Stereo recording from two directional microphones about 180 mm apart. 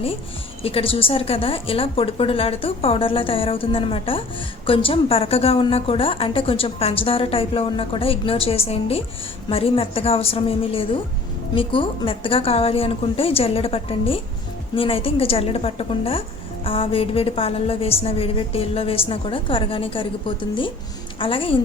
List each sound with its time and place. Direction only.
0.6 s a woman's voice: 30° left (ahead or behind)